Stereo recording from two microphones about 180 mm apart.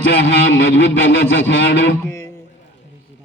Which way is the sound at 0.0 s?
90° left.